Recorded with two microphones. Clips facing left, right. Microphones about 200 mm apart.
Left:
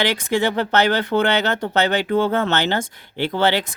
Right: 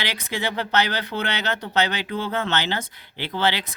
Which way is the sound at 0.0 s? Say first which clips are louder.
Left 9 dB; 50° left (ahead or behind).